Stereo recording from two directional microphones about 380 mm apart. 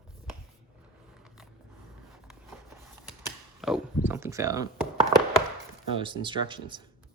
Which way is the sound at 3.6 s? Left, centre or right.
Centre.